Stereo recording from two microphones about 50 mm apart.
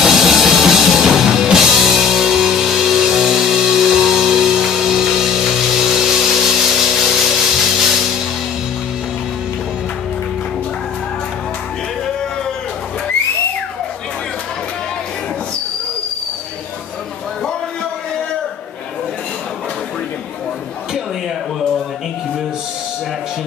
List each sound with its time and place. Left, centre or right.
0.0 s music: centre